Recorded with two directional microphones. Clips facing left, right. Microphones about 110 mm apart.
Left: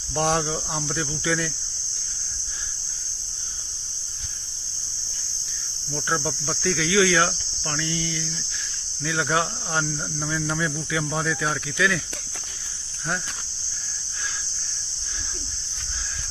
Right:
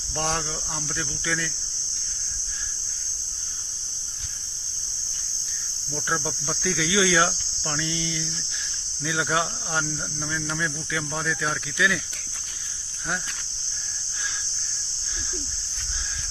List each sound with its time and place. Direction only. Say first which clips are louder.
0.2 s speech: left 5 dB; 10° left (ahead or behind)
5.9 s cricket: left 2 dB; centre (ahead or behind)